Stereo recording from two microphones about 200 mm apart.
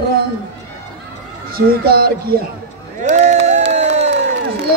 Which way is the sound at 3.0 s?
35° right (ahead or behind).